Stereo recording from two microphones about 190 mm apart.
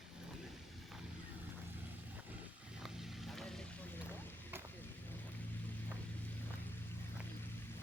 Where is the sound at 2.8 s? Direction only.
Centre (ahead or behind).